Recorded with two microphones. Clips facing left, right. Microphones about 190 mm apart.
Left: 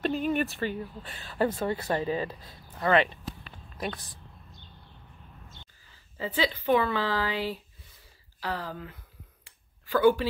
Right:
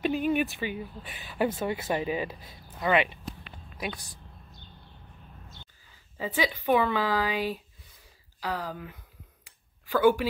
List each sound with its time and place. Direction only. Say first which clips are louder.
0.0 s speech: right 1 dB; 5° right (ahead or behind)
1.0 s speech: even; 15° right (ahead or behind)
6.1 s speech: even; 15° right (ahead or behind)
9.4 s a sound: even; 15° right (ahead or behind)